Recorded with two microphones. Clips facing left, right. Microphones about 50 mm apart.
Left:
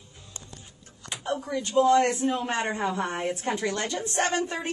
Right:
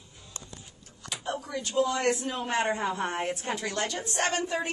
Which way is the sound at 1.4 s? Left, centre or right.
Left.